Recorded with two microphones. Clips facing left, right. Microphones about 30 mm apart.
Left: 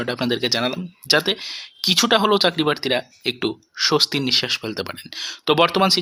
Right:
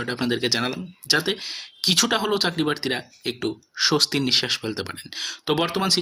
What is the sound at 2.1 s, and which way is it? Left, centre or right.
Speech, left.